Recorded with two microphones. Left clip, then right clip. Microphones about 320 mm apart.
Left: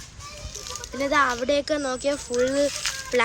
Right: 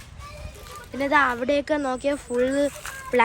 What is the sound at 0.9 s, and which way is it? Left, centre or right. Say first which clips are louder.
Speech: right 1 dB; right.